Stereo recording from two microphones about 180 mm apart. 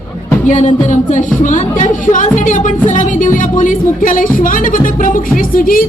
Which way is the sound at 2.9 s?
45° left (ahead or behind).